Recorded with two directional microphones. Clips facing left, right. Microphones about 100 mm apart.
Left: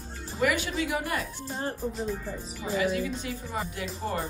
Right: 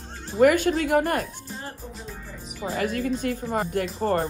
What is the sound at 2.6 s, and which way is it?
Speech, 50° right (ahead or behind).